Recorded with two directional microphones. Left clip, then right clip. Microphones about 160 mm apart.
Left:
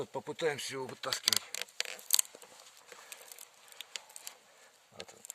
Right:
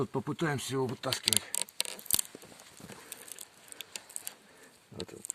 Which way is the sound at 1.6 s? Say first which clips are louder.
Right 2 dB; 15° left (ahead or behind).